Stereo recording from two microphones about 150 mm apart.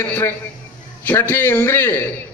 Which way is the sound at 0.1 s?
15° left (ahead or behind).